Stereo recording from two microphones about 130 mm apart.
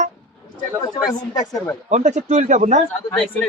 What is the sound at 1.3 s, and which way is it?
Speech, 30° left (ahead or behind).